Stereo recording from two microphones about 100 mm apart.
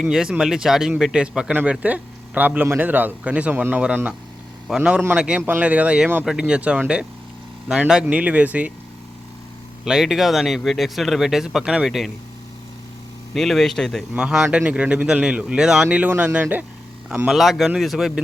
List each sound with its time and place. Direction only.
0.0 s speech: 5° right (ahead or behind)
9.8 s speech: 5° right (ahead or behind)
13.3 s speech: centre (ahead or behind)
14.1 s speech: 10° right (ahead or behind)
17.2 s speech: centre (ahead or behind)